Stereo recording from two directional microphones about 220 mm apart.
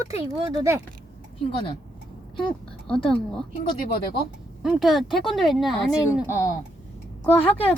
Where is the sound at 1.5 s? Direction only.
25° left (ahead or behind).